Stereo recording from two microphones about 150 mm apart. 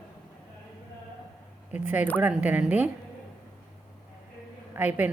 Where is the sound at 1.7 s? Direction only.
10° right (ahead or behind).